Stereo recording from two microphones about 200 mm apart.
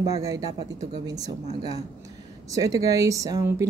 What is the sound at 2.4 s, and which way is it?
Speech, 15° right (ahead or behind).